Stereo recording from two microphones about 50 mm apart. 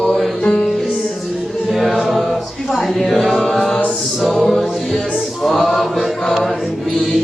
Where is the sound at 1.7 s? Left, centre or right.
Centre.